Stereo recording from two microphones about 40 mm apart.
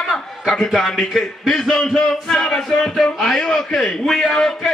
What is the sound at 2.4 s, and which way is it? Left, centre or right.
A man's voice, centre.